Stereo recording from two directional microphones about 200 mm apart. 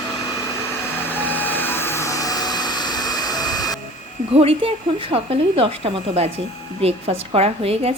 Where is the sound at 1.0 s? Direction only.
10° left (ahead or behind).